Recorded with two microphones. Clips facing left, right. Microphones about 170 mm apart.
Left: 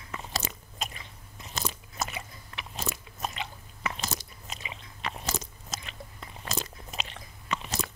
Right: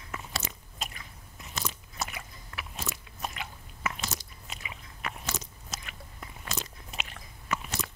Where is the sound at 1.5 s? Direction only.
35° left (ahead or behind).